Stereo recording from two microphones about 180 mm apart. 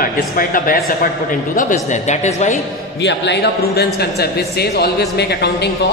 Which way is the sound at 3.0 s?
75° left (ahead or behind).